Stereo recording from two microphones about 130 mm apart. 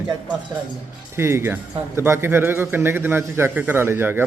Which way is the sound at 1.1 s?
20° right (ahead or behind).